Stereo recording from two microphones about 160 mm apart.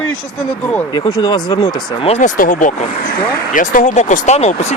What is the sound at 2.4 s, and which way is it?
Speech, 55° left (ahead or behind).